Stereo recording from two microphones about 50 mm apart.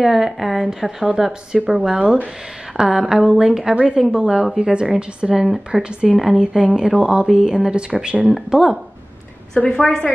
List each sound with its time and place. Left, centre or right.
0.0 s a woman's voice: centre
8.3 s speech: centre
9.6 s a woman's voice: centre